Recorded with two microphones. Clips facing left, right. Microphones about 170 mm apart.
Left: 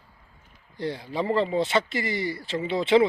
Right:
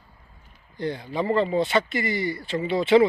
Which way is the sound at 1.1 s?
25° left (ahead or behind).